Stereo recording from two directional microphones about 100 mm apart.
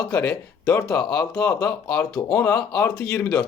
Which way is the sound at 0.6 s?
25° left (ahead or behind).